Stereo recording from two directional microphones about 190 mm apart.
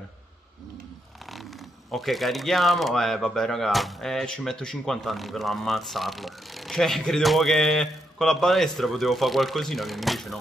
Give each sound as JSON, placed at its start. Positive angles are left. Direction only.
{"t": 1.2, "sound": "speech", "side_deg": 0}